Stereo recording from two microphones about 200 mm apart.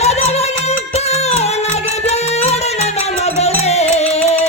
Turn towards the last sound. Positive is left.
turn(degrees=10)  # may be behind; listen again after turning